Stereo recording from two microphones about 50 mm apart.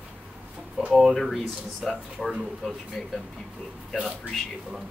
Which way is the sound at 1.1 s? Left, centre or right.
Centre.